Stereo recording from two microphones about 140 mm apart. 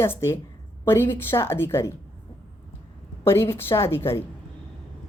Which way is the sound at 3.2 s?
15° left (ahead or behind).